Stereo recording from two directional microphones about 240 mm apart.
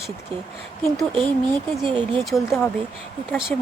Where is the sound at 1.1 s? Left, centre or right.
Right.